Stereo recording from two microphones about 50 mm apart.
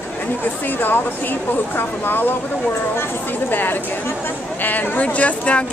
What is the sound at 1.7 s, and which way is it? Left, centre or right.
Speech, left.